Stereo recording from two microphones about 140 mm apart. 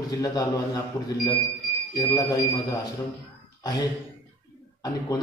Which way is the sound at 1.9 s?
30° left (ahead or behind).